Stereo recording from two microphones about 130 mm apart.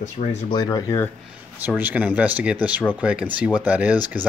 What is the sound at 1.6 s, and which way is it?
Speech, 15° right (ahead or behind).